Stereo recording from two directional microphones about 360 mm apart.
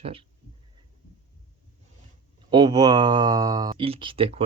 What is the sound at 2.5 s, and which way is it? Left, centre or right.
Speech, centre.